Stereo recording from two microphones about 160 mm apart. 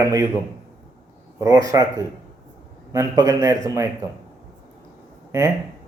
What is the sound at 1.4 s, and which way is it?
A man's voice, 20° right (ahead or behind).